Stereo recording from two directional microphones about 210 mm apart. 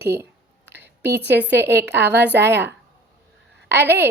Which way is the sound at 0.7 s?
55° right (ahead or behind).